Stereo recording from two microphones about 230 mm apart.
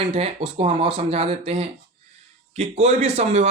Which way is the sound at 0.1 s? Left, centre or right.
Right.